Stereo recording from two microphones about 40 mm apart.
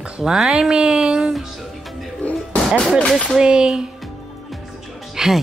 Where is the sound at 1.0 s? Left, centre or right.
Right.